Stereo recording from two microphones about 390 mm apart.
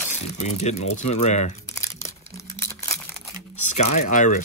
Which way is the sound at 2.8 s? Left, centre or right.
Centre.